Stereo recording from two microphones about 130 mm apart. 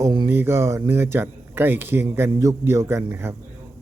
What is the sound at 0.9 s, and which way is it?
A man's voice, 15° right (ahead or behind).